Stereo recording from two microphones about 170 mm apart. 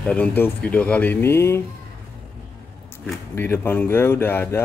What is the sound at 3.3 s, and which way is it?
Speech, 15° left (ahead or behind).